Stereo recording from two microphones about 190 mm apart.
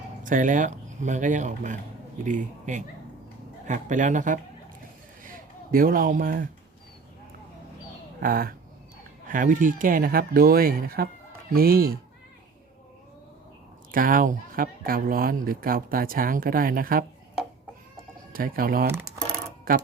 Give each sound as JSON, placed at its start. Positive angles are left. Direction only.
{"t": 0.2, "sound": "speech", "side_deg": -45}
{"t": 8.2, "sound": "speech", "side_deg": -50}
{"t": 13.9, "sound": "speech", "side_deg": -45}
{"t": 18.3, "sound": "speech", "side_deg": -50}